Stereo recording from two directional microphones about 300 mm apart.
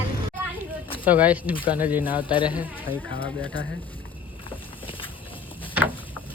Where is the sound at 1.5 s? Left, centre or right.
Centre.